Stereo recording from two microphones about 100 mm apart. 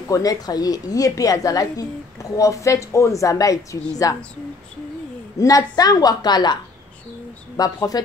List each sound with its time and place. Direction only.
0.1 s a woman's voice: 35° left (ahead or behind)
5.4 s a woman's voice: 40° left (ahead or behind)